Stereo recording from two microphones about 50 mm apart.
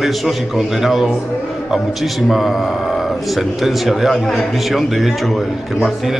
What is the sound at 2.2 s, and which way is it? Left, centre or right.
Speech, centre.